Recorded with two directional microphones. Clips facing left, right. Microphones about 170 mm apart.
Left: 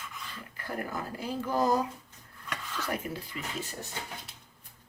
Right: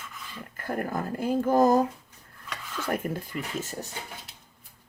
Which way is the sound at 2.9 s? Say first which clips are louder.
Right 6 dB; 50° right (ahead or behind).